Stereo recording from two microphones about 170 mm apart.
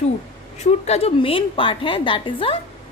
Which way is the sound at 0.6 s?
40° left (ahead or behind).